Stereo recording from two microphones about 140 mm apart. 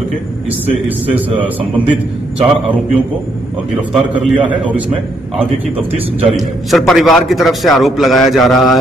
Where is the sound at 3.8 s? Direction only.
10° right (ahead or behind).